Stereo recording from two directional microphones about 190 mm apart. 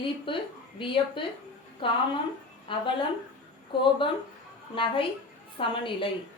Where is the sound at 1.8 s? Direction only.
25° left (ahead or behind).